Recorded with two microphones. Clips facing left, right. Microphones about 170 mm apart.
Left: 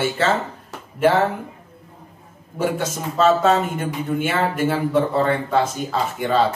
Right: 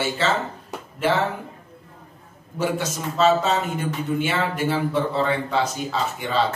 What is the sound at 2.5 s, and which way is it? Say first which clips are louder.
A man's voice: left 2 dB; 50° left (ahead or behind).